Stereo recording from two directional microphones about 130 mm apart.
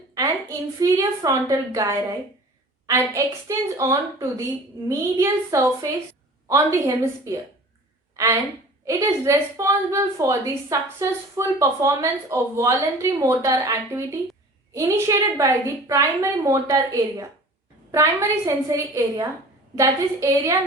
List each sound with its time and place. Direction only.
0.1 s a woman's voice: 25° right (ahead or behind)